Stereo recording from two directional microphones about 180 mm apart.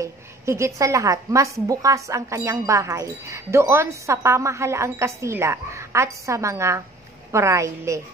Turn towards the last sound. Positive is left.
turn(degrees=-15)  # may be behind; listen again after turning